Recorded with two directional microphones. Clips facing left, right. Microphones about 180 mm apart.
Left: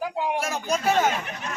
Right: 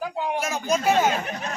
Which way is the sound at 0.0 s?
10° left (ahead or behind).